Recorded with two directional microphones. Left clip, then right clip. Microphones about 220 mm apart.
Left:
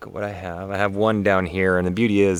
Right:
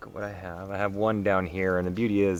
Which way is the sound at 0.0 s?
50° left (ahead or behind).